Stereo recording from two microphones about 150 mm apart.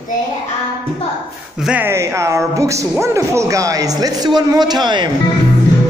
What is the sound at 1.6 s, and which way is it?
Speech, 10° right (ahead or behind).